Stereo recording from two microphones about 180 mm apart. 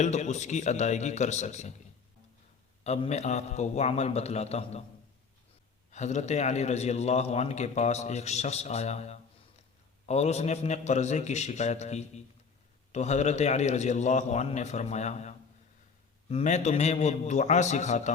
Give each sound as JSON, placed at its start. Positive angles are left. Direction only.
{"t": 0.0, "sound": "a man's voice", "side_deg": 40}
{"t": 2.8, "sound": "a man's voice", "side_deg": 35}
{"t": 5.9, "sound": "a man's voice", "side_deg": 40}
{"t": 16.3, "sound": "a man's voice", "side_deg": 40}